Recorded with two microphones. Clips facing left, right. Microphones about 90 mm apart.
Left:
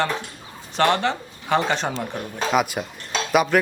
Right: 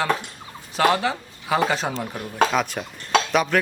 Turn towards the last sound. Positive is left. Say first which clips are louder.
# left 2 dB
turn(degrees=5)  # may be behind; listen again after turning